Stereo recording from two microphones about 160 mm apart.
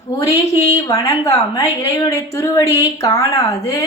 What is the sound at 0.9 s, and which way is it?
A woman's voice, 20° left (ahead or behind).